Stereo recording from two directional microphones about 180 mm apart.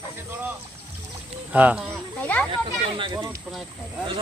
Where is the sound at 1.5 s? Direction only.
10° right (ahead or behind).